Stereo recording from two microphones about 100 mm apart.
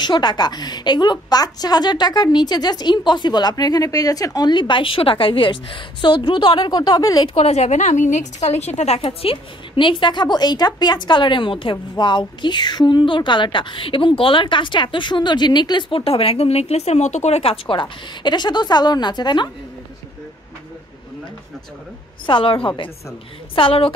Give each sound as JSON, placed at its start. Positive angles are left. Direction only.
{"t": 0.0, "sound": "a woman's voice", "side_deg": 45}
{"t": 7.2, "sound": "a woman's voice", "side_deg": 85}
{"t": 16.0, "sound": "a woman's voice", "side_deg": 70}
{"t": 22.2, "sound": "a woman's voice", "side_deg": 60}